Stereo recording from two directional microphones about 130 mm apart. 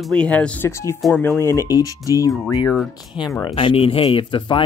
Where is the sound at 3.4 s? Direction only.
40° left (ahead or behind).